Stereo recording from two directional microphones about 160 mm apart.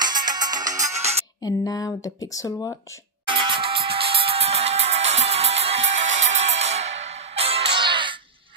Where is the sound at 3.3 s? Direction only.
30° right (ahead or behind).